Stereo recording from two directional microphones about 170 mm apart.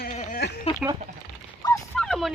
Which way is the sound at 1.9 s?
5° left (ahead or behind).